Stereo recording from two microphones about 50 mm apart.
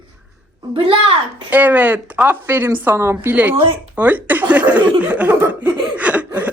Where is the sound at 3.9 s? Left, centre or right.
Right.